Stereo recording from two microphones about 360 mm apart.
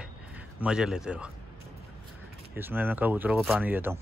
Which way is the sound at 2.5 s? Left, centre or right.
Centre.